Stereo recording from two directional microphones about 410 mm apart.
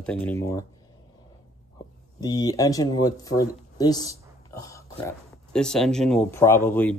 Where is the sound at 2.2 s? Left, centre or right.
Centre.